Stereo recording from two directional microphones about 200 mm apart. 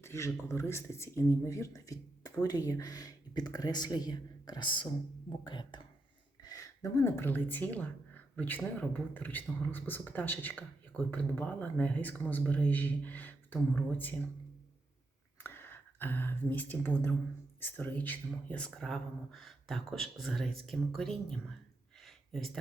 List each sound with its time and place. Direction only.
0.0 s speech: 15° left (ahead or behind)
15.4 s speech: 10° left (ahead or behind)
22.0 s a sound: centre (ahead or behind)